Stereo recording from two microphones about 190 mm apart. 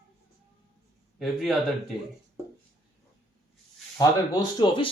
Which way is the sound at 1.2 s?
Centre (ahead or behind).